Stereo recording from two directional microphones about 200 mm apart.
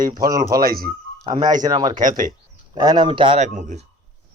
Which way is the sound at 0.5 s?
50° right (ahead or behind).